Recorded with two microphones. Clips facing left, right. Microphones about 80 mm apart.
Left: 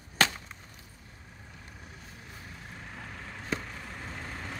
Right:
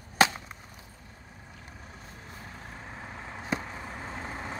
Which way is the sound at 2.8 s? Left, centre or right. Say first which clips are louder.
Right 1 dB; right.